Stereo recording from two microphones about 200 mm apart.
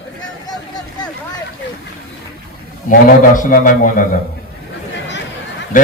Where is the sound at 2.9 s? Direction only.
45° left (ahead or behind).